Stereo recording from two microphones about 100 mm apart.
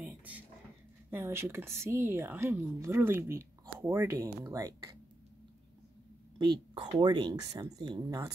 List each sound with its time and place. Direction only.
0.0 s a sound: 15° right (ahead or behind)
1.1 s speech: 25° right (ahead or behind)
4.1 s speech: 35° right (ahead or behind)
6.3 s speech: 50° right (ahead or behind)